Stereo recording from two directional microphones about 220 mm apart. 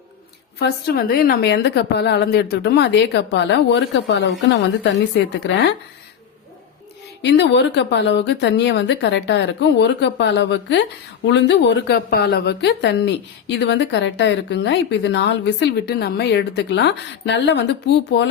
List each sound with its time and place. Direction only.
0.6 s a woman's voice: 45° left (ahead or behind)
7.2 s a woman's voice: 50° left (ahead or behind)